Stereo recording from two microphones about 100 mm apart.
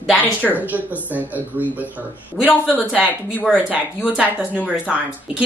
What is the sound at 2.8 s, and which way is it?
Speech, 10° right (ahead or behind).